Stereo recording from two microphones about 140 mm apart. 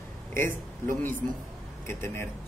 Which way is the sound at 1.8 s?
20° left (ahead or behind).